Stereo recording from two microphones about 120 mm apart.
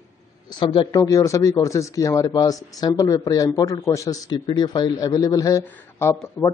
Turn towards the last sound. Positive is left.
turn(degrees=20)  # may be behind; listen again after turning